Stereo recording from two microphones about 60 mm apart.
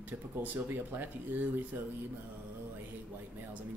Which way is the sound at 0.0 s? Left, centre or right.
Right.